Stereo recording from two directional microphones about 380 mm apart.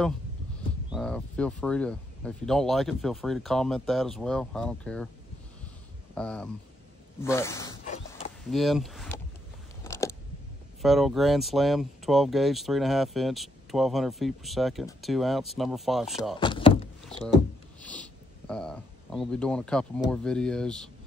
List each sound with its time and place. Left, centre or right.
0.8 s speech: centre
6.1 s speech: centre
7.8 s a sound: centre
8.5 s speech: centre
9.8 s a sound: centre
10.8 s speech: centre
16.3 s door: centre
17.2 s speech: centre